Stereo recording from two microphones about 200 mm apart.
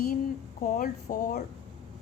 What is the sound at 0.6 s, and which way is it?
Speech, 45° left (ahead or behind).